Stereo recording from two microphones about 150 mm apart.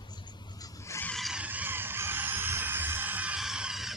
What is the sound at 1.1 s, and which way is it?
Music, centre (ahead or behind).